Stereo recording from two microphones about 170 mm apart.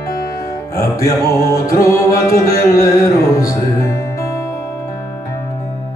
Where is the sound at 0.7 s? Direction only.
20° left (ahead or behind).